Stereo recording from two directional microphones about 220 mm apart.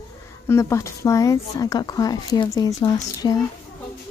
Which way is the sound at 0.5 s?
10° left (ahead or behind).